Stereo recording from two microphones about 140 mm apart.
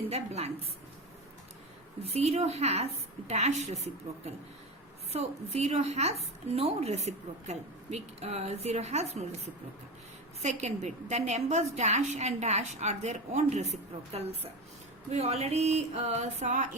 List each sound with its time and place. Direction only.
0.1 s a woman's voice: 50° right (ahead or behind)
2.1 s a woman's voice: 50° right (ahead or behind)
5.1 s a woman's voice: 50° right (ahead or behind)
10.4 s a woman's voice: 55° right (ahead or behind)